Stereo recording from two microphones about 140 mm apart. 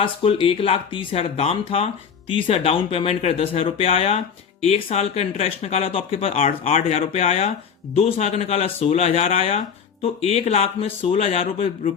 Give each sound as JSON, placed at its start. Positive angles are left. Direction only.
{"t": 0.0, "sound": "speech", "side_deg": 40}